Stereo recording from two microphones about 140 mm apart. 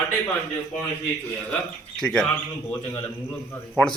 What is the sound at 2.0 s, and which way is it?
Speech, 5° left (ahead or behind).